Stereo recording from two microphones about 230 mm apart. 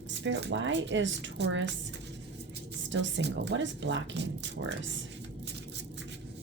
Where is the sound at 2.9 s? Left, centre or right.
Right.